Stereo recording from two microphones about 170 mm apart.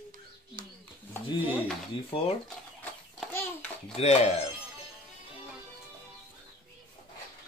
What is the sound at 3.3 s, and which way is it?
Babbling, 15° left (ahead or behind).